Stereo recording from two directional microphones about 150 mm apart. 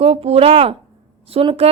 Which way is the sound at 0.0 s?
45° right (ahead or behind).